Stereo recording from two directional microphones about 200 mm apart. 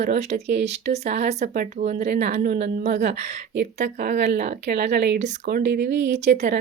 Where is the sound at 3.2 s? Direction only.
35° right (ahead or behind).